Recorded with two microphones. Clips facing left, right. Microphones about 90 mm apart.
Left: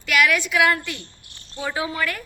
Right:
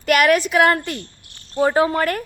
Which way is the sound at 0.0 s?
50° right (ahead or behind).